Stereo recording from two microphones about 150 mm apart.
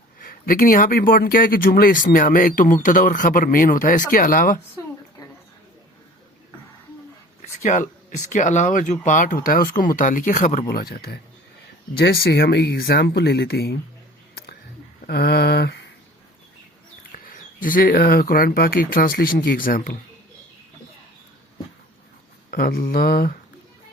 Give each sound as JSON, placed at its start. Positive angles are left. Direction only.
{"t": 0.2, "sound": "speech", "side_deg": 75}
{"t": 7.4, "sound": "speech", "side_deg": 55}
{"t": 10.7, "sound": "speech", "side_deg": 90}
{"t": 15.0, "sound": "speech", "side_deg": 90}
{"t": 17.1, "sound": "speech", "side_deg": 65}
{"t": 22.4, "sound": "speech", "side_deg": 75}